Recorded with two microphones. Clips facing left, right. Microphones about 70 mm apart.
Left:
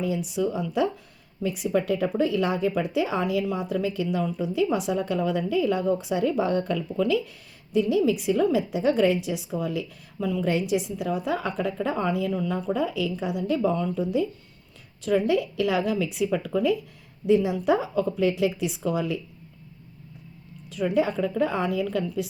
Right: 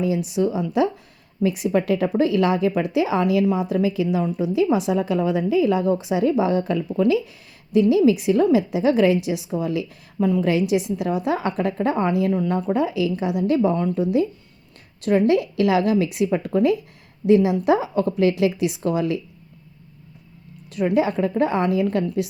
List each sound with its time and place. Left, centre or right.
0.0 s a woman's voice: right
6.9 s a woman's voice: right
10.4 s a woman's voice: right
12.7 s a woman's voice: right
16.3 s speech: right
17.2 s a woman's voice: right
20.7 s a woman's voice: right